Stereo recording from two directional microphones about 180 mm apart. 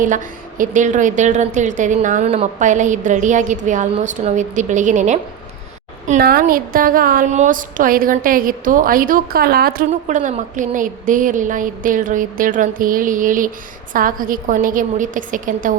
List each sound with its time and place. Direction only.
0.6 s speech: 45° right (ahead or behind)
6.1 s speech: 55° right (ahead or behind)